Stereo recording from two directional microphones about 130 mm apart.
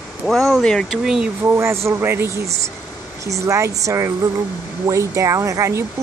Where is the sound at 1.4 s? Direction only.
20° right (ahead or behind).